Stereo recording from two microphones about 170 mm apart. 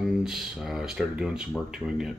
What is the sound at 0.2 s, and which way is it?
Speech, centre (ahead or behind).